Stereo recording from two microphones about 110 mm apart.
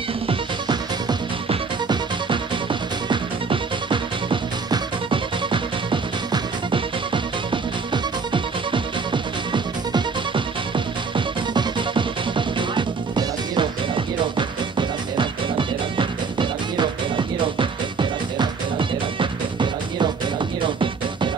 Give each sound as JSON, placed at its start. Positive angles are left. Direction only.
{"t": 0.3, "sound": "music", "side_deg": -45}